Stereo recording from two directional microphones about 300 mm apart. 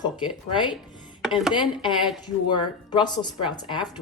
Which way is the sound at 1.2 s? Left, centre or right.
Centre.